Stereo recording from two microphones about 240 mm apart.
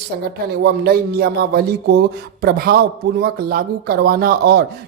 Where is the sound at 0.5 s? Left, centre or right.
Right.